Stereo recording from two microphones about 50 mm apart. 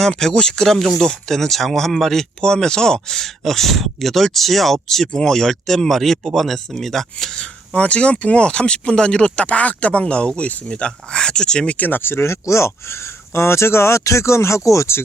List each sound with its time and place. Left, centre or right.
0.2 s speech: centre
7.7 s speech: left
11.7 s speech: left